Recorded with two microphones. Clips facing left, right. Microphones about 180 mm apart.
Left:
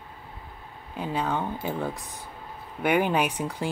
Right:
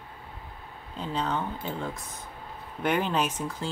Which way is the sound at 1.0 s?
10° left (ahead or behind).